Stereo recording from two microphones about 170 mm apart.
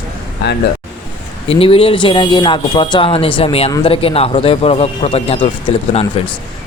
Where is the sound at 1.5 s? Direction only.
35° left (ahead or behind).